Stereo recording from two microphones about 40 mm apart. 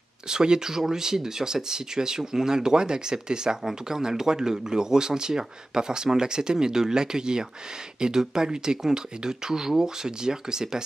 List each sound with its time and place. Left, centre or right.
0.3 s speech: centre